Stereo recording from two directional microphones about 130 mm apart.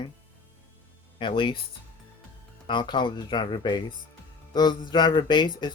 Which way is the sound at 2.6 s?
35° left (ahead or behind).